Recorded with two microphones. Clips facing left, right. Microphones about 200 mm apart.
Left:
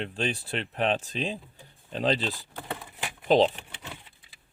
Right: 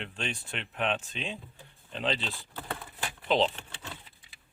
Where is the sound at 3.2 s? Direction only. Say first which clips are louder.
Left 6 dB; 40° left (ahead or behind).